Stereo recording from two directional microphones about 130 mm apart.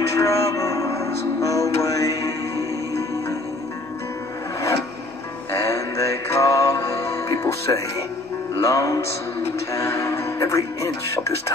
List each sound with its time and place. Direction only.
0.2 s music: 25° left (ahead or behind)
5.5 s music: 25° left (ahead or behind)
9.7 s speech: 25° left (ahead or behind)